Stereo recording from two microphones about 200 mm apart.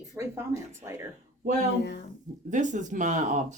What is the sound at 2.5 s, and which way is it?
Speech, 40° right (ahead or behind).